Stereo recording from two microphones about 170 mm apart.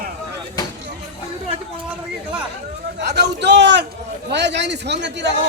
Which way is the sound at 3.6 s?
90° right.